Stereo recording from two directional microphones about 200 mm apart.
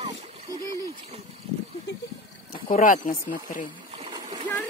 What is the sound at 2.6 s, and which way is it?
Speech, 40° left (ahead or behind).